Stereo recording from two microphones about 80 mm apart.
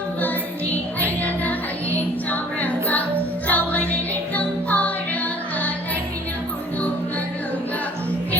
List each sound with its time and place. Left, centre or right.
0.9 s music: left